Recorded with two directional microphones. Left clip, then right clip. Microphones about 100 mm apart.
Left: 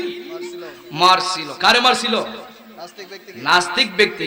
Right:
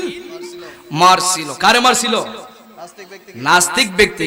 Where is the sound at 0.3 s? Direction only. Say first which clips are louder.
Even; 20° right (ahead or behind).